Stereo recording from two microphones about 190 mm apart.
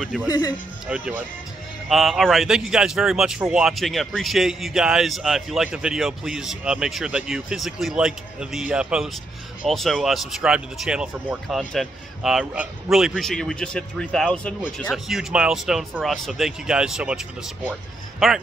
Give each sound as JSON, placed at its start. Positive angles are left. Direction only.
{"t": 0.0, "sound": "speech", "side_deg": 0}
{"t": 0.3, "sound": "speech", "side_deg": 20}
{"t": 0.8, "sound": "speech", "side_deg": -5}
{"t": 18.2, "sound": "speech", "side_deg": 0}